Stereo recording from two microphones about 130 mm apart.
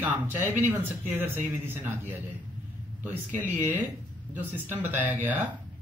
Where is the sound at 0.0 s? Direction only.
15° right (ahead or behind).